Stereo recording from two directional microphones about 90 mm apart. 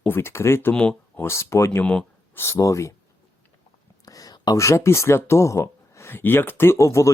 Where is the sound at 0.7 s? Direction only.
10° left (ahead or behind).